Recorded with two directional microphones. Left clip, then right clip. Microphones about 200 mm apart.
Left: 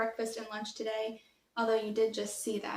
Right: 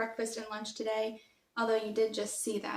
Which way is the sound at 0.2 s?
5° right (ahead or behind).